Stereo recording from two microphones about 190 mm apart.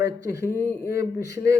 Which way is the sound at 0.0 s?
15° right (ahead or behind).